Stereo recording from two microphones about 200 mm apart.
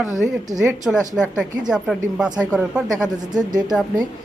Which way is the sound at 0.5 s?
5° right (ahead or behind).